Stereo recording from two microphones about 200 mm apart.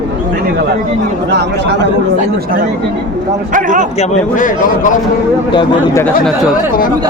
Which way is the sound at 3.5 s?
40° right (ahead or behind).